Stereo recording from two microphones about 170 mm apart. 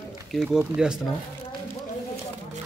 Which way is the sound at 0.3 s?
Centre (ahead or behind).